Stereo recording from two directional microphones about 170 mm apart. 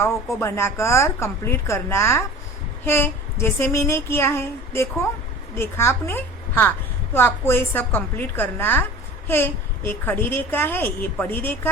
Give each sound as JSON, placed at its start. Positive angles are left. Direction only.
{"t": 0.0, "sound": "a child's voice", "side_deg": 15}